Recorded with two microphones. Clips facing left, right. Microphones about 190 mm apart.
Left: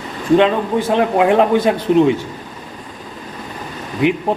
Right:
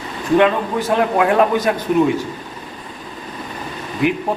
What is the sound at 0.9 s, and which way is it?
A man's voice, 20° left (ahead or behind).